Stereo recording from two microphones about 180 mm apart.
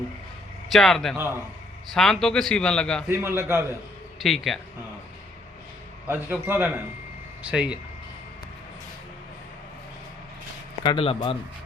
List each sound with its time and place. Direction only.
0.7 s a man's voice: centre (ahead or behind)
3.1 s a man's voice: 15° right (ahead or behind)
4.2 s a man's voice: centre (ahead or behind)
6.1 s a man's voice: 10° right (ahead or behind)
10.8 s speech: 30° left (ahead or behind)